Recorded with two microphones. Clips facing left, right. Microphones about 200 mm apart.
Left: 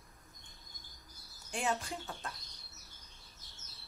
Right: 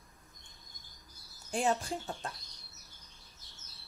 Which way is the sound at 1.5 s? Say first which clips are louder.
Right 5 dB; 35° right (ahead or behind).